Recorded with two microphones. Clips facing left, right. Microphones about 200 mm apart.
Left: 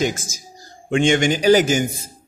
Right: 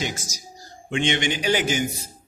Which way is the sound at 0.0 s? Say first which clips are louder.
Left 8 dB; 50° left (ahead or behind).